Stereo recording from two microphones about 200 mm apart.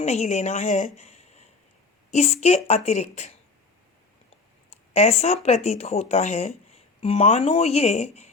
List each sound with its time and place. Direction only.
0.0 s a woman's voice: 35° left (ahead or behind)
4.9 s speech: 35° left (ahead or behind)